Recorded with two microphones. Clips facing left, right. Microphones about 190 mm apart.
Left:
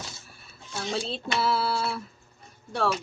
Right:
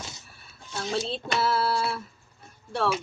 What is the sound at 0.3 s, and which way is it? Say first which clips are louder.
Speech: even; centre (ahead or behind).